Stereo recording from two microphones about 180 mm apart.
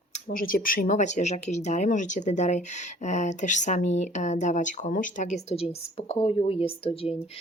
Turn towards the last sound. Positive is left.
turn(degrees=35)  # may be behind; listen again after turning